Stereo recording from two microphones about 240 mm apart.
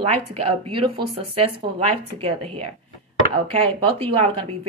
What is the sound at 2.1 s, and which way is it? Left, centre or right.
Speech, right.